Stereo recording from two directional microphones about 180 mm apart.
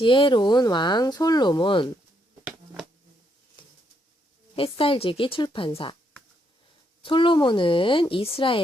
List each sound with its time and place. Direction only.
0.0 s speech: 25° left (ahead or behind)
4.5 s speech: 30° left (ahead or behind)
7.0 s speech: 25° left (ahead or behind)